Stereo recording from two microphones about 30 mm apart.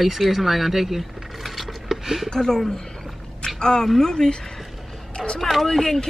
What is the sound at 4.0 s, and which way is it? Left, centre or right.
Speech, left.